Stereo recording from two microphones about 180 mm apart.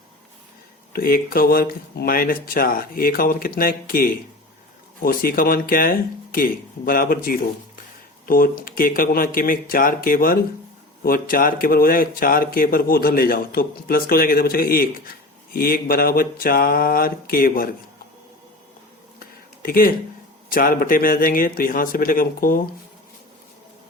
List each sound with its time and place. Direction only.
0.9 s speech: 55° left (ahead or behind)
19.6 s speech: 55° left (ahead or behind)